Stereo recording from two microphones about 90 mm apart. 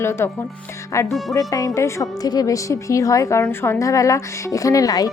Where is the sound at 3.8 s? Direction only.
35° left (ahead or behind).